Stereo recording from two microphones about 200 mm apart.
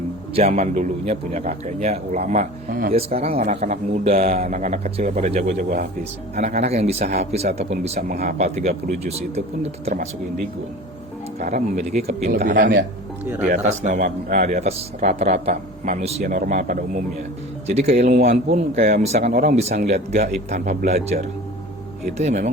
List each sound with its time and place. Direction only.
0.4 s speech: 40° right (ahead or behind)
3.2 s speech: 30° right (ahead or behind)
12.4 s a man's voice: 45° right (ahead or behind)